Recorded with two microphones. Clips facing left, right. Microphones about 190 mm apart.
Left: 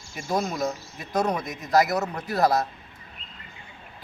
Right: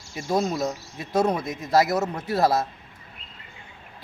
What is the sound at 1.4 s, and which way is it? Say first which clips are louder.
Speech: right 1 dB; 25° right (ahead or behind).